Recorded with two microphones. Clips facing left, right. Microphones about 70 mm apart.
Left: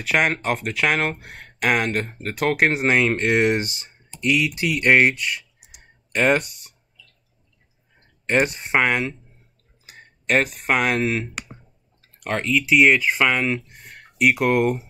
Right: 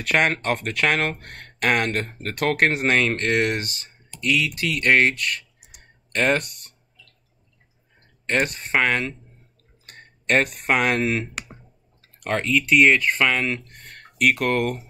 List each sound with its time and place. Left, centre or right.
0.0 s speech: centre
3.7 s typing: left
4.6 s speech: centre
5.1 s clicking: centre
8.5 s speech: centre